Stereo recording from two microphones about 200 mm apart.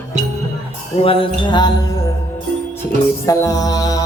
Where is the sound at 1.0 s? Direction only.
25° left (ahead or behind).